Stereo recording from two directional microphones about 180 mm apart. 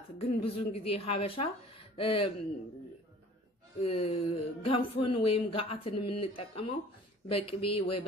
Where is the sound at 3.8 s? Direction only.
35° left (ahead or behind).